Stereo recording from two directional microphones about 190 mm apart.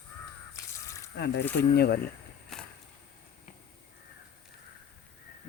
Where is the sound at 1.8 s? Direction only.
55° left (ahead or behind).